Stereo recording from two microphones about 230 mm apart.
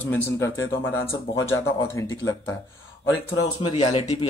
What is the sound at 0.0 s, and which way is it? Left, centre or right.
Speech, centre.